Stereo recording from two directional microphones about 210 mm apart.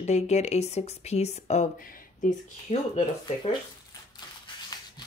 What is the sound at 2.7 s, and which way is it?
Speech, 30° left (ahead or behind).